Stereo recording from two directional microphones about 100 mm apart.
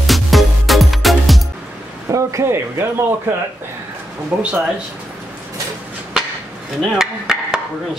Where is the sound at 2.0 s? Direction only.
35° right (ahead or behind).